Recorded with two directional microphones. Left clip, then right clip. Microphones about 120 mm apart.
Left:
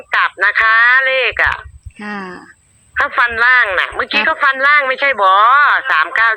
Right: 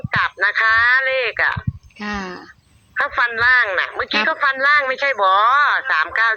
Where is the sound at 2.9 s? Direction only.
40° left (ahead or behind).